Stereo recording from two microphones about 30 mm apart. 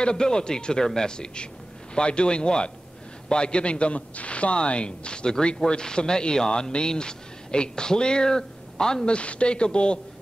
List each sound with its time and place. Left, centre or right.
0.0 s a man's voice: left
9.0 s a man's voice: left